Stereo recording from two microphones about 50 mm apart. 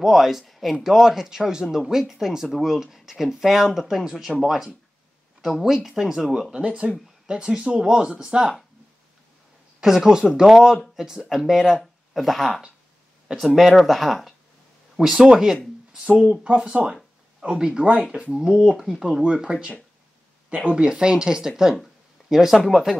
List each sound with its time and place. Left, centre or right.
0.0 s speech: centre
6.5 s speech: right
9.8 s speech: centre
15.0 s speech: centre